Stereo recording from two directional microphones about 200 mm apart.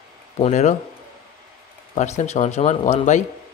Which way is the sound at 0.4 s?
35° left (ahead or behind).